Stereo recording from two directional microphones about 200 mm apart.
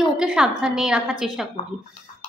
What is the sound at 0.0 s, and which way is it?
A woman's voice, 5° right (ahead or behind).